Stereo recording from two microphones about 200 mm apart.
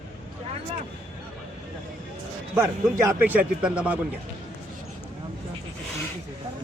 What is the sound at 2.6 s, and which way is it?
Speech, 15° right (ahead or behind).